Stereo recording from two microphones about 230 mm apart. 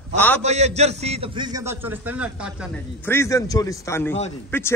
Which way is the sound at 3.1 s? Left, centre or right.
Centre.